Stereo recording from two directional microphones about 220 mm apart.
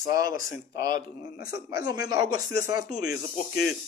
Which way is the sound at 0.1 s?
15° right (ahead or behind).